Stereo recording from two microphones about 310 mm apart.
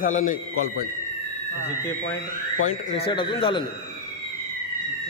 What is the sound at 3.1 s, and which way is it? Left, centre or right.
Speech, centre.